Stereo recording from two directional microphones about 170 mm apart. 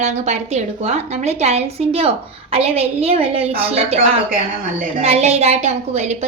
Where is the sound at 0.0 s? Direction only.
40° right (ahead or behind).